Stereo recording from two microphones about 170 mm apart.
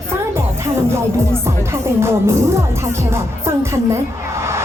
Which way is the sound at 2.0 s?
15° right (ahead or behind).